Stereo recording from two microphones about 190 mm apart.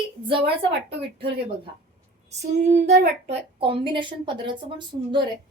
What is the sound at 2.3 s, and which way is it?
Female singing, 35° right (ahead or behind).